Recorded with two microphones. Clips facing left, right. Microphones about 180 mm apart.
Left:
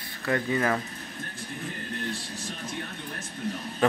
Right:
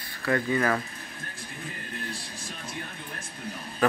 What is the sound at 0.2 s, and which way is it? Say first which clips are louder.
Speech: right 1 dB; 20° left (ahead or behind).